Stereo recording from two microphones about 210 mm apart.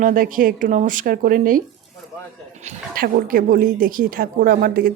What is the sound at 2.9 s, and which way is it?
Speech, 40° right (ahead or behind).